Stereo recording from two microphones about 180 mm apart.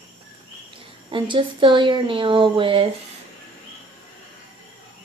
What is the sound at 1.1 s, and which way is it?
Speech, 25° right (ahead or behind).